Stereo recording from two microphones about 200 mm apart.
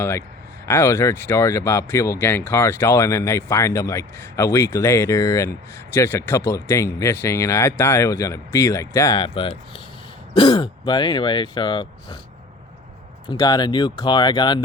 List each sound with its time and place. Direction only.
0.0 s speech: 15° left (ahead or behind)
13.3 s speech: 20° left (ahead or behind)